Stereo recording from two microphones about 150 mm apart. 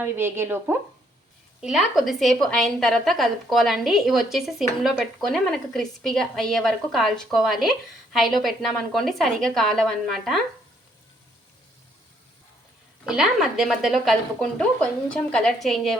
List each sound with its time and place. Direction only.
0.0 s speech: 15° right (ahead or behind)
1.6 s a woman's voice: centre (ahead or behind)
13.1 s a woman's voice: 5° right (ahead or behind)